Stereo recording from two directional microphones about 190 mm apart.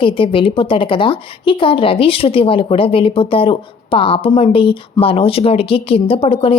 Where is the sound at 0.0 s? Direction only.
25° left (ahead or behind).